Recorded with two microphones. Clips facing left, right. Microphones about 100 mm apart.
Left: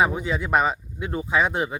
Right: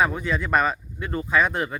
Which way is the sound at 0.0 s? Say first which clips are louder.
Left 1 dB; 15° left (ahead or behind).